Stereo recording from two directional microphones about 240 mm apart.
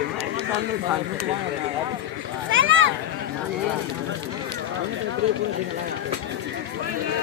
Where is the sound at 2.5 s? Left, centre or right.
Right.